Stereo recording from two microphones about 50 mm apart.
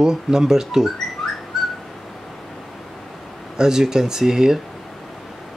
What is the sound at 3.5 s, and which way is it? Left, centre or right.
Speech, centre.